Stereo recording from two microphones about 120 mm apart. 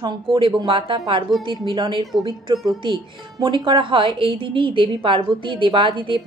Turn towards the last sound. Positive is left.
turn(degrees=-45)  # may be behind; listen again after turning